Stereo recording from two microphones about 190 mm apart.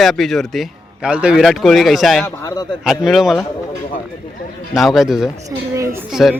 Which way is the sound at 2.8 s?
Centre (ahead or behind).